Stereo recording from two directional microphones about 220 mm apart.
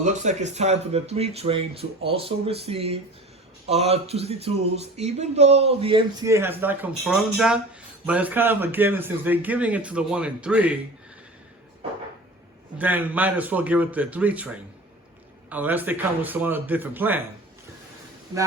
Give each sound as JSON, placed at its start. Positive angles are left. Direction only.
{"t": 0.0, "sound": "a man's voice", "side_deg": -35}
{"t": 12.8, "sound": "a man's voice", "side_deg": -10}